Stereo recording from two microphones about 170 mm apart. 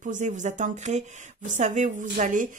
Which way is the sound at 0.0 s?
45° right (ahead or behind).